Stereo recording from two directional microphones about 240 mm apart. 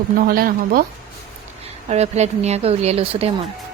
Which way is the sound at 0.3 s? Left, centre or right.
Right.